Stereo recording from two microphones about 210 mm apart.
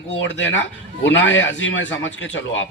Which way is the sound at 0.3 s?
60° left (ahead or behind).